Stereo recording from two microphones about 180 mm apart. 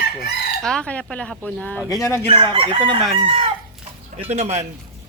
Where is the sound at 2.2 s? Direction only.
30° right (ahead or behind).